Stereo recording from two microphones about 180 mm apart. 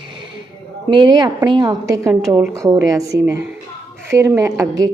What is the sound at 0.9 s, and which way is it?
A woman's voice, 25° right (ahead or behind).